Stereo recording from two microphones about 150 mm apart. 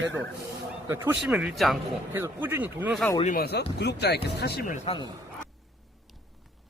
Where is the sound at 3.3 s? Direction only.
90° left.